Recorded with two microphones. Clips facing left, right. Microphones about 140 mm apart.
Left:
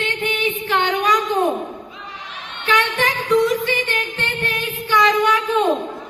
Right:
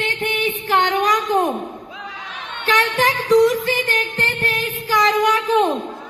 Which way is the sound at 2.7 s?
40° right (ahead or behind).